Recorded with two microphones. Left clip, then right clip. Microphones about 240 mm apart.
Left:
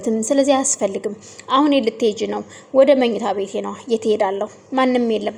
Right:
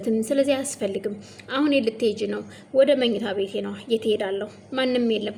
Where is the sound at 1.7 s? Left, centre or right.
Centre.